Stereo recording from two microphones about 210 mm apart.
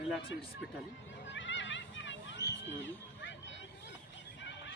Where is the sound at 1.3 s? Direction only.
60° left (ahead or behind).